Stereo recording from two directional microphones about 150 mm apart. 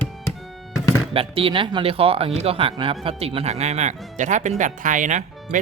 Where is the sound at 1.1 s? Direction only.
40° right (ahead or behind).